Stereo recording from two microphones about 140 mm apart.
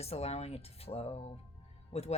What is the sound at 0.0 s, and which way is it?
Speech, 45° left (ahead or behind).